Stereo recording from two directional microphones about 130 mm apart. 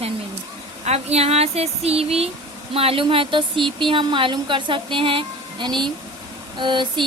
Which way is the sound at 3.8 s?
40° right (ahead or behind).